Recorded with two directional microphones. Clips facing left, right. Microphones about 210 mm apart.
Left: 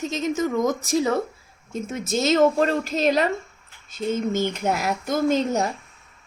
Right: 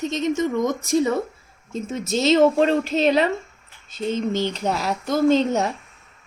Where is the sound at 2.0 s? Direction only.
50° left (ahead or behind).